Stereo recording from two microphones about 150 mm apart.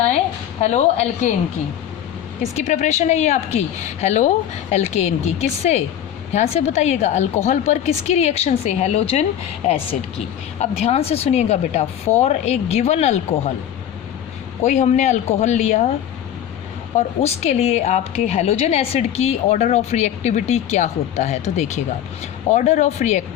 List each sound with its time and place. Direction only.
0.6 s a woman's voice: 50° left (ahead or behind)
2.6 s a woman's voice: 50° left (ahead or behind)
14.6 s a woman's voice: 50° left (ahead or behind)
17.2 s a woman's voice: 45° left (ahead or behind)